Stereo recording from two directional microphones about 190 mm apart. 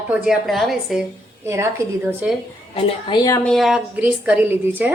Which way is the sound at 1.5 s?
15° right (ahead or behind).